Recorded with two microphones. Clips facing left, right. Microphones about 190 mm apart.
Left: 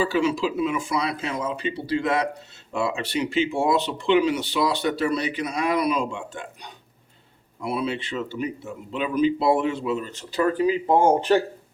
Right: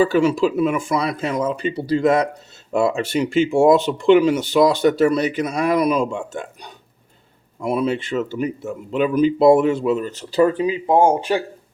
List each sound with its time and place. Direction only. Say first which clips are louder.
0.0 s speech: right 6 dB; 50° right (ahead or behind)
10.6 s speech: right 3 dB; 15° right (ahead or behind)